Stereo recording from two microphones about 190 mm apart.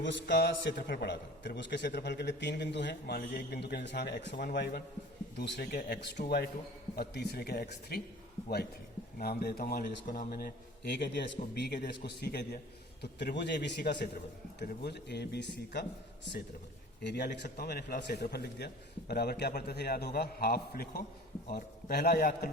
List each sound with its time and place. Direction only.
0.0 s a man's voice: 70° left (ahead or behind)
9.1 s a man's voice: 50° left (ahead or behind)
11.0 s a man's voice: 65° left (ahead or behind)